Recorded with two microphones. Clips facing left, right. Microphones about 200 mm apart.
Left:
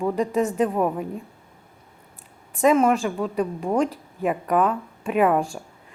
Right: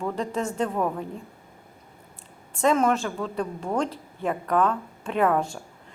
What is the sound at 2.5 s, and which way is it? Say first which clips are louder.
A woman's voice: left 4 dB; 10° left (ahead or behind).